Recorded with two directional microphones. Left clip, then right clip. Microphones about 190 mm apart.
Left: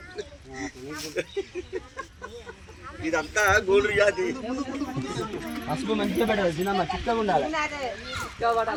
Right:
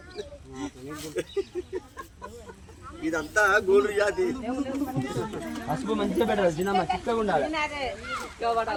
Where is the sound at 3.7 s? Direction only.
50° right (ahead or behind).